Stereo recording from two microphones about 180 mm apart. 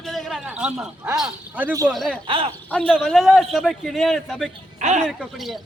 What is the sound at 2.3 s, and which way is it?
Speech, 30° right (ahead or behind).